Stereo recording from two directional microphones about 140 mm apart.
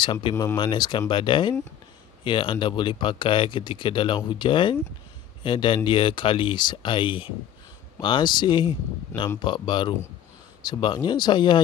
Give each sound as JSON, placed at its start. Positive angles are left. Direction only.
{"t": 0.0, "sound": "speech", "side_deg": 35}